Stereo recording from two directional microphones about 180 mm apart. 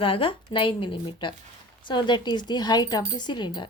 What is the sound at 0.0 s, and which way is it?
Speech, 30° left (ahead or behind).